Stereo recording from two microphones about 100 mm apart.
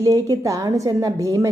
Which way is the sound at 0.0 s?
35° right (ahead or behind).